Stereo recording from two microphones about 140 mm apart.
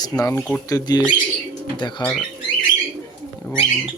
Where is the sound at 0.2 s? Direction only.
25° left (ahead or behind).